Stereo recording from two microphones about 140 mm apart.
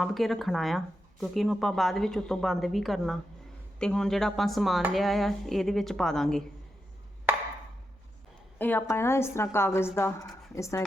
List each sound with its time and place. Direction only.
0.0 s a woman's voice: centre (ahead or behind)
8.5 s a woman's voice: 15° left (ahead or behind)